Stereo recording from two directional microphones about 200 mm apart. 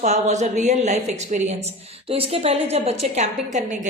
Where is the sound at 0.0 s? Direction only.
35° right (ahead or behind).